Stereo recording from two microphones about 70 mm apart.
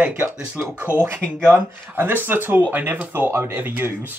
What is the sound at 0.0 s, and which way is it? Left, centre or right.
Speech, right.